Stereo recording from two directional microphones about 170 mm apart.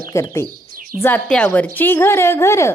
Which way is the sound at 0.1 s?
15° left (ahead or behind).